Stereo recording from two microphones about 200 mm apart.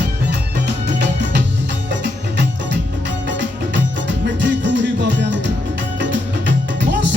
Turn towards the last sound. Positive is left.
turn(degrees=-60)  # may be behind; listen again after turning